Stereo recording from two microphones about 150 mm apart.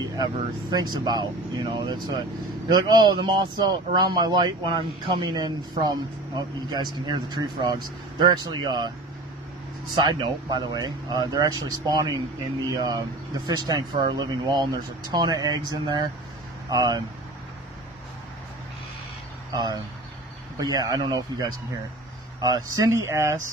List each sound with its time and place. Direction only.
0.1 s speech: 25° right (ahead or behind)
9.9 s speech: 30° right (ahead or behind)
19.5 s speech: 25° right (ahead or behind)